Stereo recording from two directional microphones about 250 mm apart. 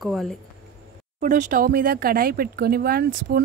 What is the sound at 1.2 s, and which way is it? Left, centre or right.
Speech, right.